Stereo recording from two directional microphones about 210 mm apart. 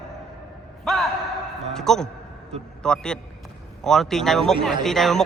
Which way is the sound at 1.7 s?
Centre (ahead or behind).